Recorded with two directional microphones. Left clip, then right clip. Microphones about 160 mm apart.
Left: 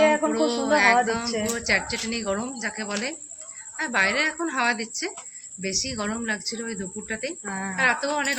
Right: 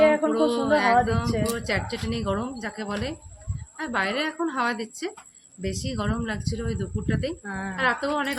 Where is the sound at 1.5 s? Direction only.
20° right (ahead or behind).